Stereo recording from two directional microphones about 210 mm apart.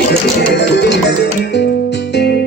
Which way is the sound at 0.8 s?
55° left (ahead or behind).